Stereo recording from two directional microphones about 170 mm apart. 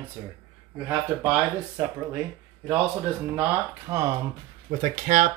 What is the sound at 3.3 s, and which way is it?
Speech, 15° right (ahead or behind).